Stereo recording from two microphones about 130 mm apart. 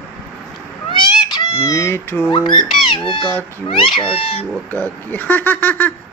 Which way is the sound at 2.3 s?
35° left (ahead or behind).